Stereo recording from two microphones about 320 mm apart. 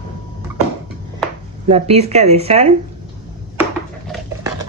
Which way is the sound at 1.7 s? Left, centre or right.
Centre.